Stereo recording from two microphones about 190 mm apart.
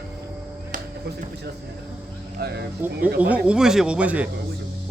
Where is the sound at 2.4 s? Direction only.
55° right (ahead or behind).